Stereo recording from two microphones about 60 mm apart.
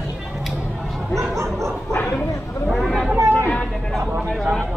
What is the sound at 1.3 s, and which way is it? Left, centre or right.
Bow-wow, right.